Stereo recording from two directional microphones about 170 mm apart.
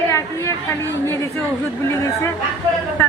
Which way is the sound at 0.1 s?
15° left (ahead or behind).